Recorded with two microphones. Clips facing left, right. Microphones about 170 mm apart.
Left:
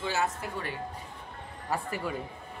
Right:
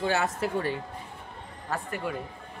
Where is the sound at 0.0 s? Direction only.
70° right (ahead or behind).